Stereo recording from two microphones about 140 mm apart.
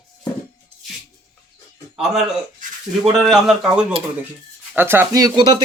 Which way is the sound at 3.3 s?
Centre (ahead or behind).